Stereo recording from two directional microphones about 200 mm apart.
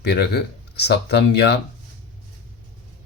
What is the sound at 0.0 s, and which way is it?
Speech, 55° left (ahead or behind).